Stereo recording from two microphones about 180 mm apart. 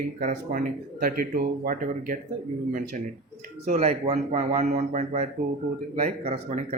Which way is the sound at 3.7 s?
35° right (ahead or behind).